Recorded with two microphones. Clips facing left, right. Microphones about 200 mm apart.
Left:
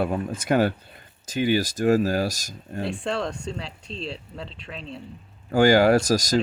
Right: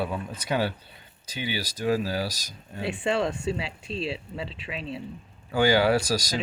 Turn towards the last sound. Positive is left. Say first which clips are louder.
# left 5 dB
turn(degrees=45)  # may be behind; listen again after turning